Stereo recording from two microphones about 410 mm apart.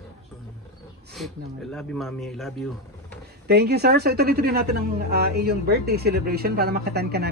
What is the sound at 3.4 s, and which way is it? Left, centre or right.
A woman's voice, right.